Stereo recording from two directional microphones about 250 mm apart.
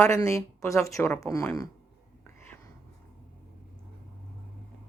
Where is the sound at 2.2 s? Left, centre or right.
Centre.